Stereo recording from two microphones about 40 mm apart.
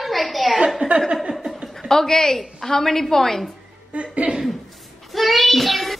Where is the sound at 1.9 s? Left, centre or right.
Centre.